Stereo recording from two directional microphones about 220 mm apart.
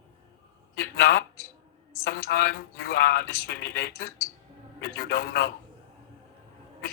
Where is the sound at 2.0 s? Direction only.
45° left (ahead or behind).